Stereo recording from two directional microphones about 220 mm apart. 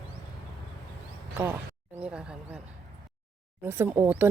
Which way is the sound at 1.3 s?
10° right (ahead or behind).